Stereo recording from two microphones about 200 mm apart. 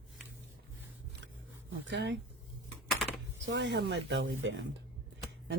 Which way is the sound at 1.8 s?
60° right (ahead or behind).